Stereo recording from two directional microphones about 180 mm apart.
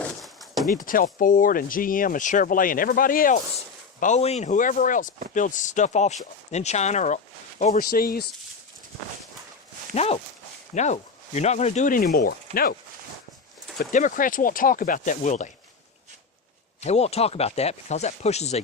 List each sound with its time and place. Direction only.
0.2 s a sound: centre (ahead or behind)
0.7 s speech: 50° left (ahead or behind)
4.0 s speech: 40° left (ahead or behind)
7.6 s speech: 50° left (ahead or behind)
9.9 s speech: 35° left (ahead or behind); by 12.7 s 55° left (ahead or behind)
13.9 s speech: 45° left (ahead or behind)
16.8 s speech: 35° left (ahead or behind)